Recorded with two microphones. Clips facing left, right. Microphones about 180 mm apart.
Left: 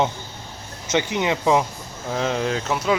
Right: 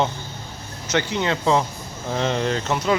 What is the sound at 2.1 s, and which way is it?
Speech, 5° left (ahead or behind).